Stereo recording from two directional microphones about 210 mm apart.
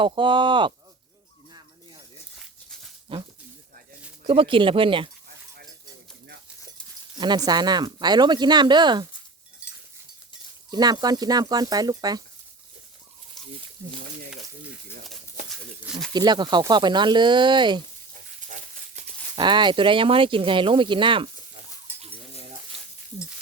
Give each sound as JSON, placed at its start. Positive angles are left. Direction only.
{"t": 0.0, "sound": "speech", "side_deg": -25}
{"t": 2.3, "sound": "a sound", "side_deg": 0}
{"t": 4.2, "sound": "speech", "side_deg": -25}
{"t": 7.2, "sound": "speech", "side_deg": -20}
{"t": 10.7, "sound": "speech", "side_deg": -20}
{"t": 13.8, "sound": "speech", "side_deg": -15}
{"t": 15.9, "sound": "a sound", "side_deg": 0}
{"t": 16.1, "sound": "speech", "side_deg": -20}
{"t": 18.4, "sound": "pig", "side_deg": -35}
{"t": 19.4, "sound": "speech", "side_deg": -20}